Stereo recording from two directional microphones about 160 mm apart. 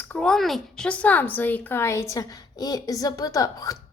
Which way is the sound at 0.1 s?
5° left (ahead or behind).